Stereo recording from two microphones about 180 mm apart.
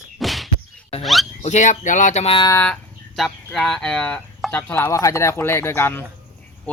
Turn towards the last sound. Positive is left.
turn(degrees=15)  # may be behind; listen again after turning